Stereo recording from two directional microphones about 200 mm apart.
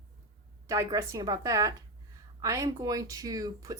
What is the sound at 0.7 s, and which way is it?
Speech, 15° right (ahead or behind).